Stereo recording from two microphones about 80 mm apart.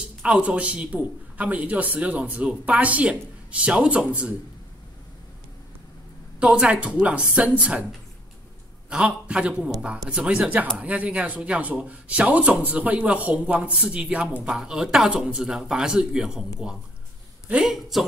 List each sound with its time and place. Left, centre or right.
0.2 s speech: centre
6.4 s speech: centre
8.9 s speech: centre
17.5 s speech: centre